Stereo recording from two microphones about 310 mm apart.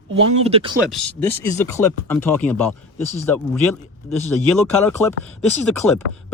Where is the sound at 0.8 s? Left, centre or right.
Centre.